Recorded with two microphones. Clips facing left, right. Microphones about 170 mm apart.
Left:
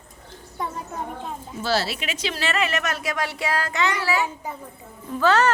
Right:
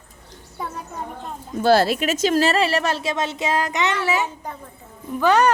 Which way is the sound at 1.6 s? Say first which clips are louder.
Right 9 dB; 55° right (ahead or behind).